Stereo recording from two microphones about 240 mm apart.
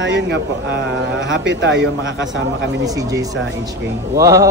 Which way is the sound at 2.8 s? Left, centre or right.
Centre.